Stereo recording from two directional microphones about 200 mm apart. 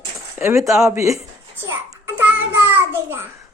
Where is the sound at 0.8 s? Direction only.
10° right (ahead or behind).